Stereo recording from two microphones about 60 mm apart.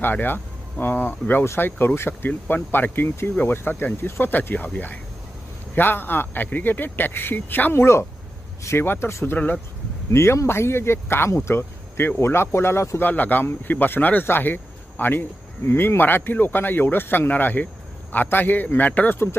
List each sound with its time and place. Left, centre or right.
0.0 s speech: left
13.0 s speech: left